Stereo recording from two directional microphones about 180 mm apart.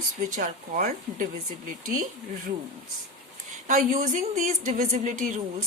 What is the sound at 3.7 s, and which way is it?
Speech, 45° right (ahead or behind).